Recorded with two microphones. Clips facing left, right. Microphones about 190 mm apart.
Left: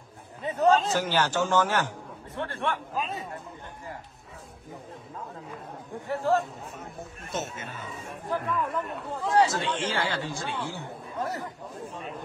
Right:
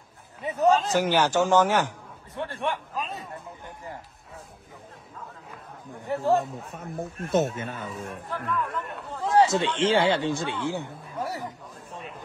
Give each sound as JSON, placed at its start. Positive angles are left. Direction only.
{"t": 0.4, "sound": "a man's voice", "side_deg": -10}
{"t": 2.9, "sound": "speech", "side_deg": 0}
{"t": 6.0, "sound": "speech", "side_deg": -20}
{"t": 6.7, "sound": "speech", "side_deg": -55}
{"t": 7.9, "sound": "speech", "side_deg": 0}
{"t": 9.4, "sound": "speech", "side_deg": -25}